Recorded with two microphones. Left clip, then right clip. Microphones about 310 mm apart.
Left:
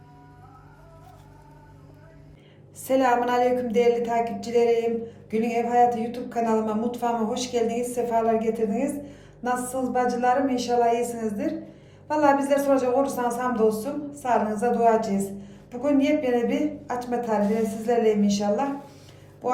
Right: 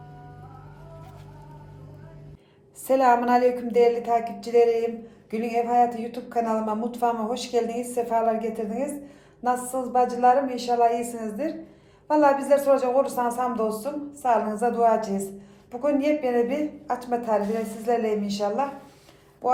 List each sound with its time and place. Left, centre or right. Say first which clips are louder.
2.8 s speech: right 2 dB; centre